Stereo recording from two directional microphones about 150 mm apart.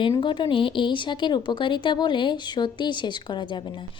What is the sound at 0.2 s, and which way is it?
A woman's voice, 30° left (ahead or behind).